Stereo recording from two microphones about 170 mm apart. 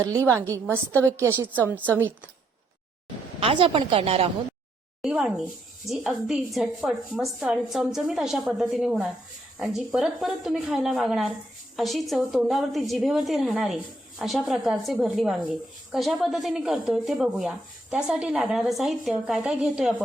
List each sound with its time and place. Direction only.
1.0 s a woman's voice: 15° right (ahead or behind)
3.4 s a woman's voice: 30° right (ahead or behind)
5.0 s a woman's voice: 5° right (ahead or behind)